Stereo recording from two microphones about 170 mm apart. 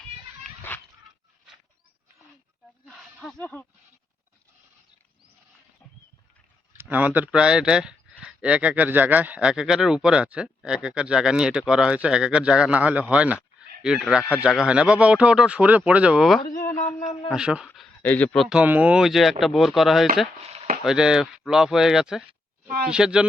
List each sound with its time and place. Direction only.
2.8 s a sound: centre (ahead or behind)
6.7 s speech: 10° right (ahead or behind)
16.4 s speech: 55° left (ahead or behind)
16.8 s a man's voice: 40° left (ahead or behind)
17.2 s speech: 5° right (ahead or behind)
17.7 s speech: 10° left (ahead or behind)
22.6 s speech: 60° right (ahead or behind)
22.9 s speech: 5° right (ahead or behind)